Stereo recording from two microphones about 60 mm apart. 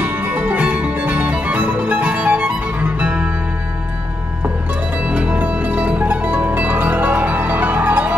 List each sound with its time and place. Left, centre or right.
0.0 s music: right
5.0 s music: right